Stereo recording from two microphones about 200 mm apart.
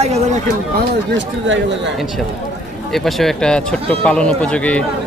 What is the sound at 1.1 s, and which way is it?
Speech, 65° right (ahead or behind).